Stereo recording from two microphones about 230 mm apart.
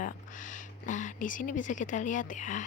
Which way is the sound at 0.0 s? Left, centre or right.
Left.